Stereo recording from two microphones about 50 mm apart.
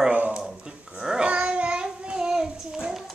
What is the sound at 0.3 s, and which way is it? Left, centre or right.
Dog, centre.